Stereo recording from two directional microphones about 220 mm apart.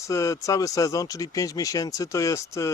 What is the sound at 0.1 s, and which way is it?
Speech, 15° left (ahead or behind).